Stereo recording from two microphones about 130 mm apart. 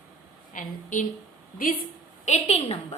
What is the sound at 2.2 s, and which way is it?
Speech, 60° left (ahead or behind).